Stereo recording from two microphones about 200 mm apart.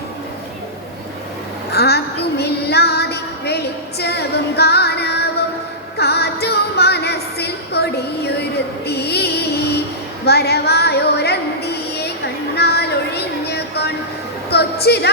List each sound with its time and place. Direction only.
1.7 s child singing: 55° left (ahead or behind)
6.0 s music: 55° left (ahead or behind)
10.2 s a sound: 55° left (ahead or behind)